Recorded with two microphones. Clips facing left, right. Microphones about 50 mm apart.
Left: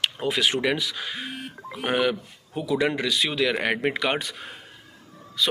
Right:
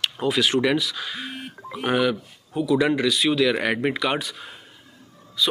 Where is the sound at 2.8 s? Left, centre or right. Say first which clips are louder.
Right 3 dB; centre.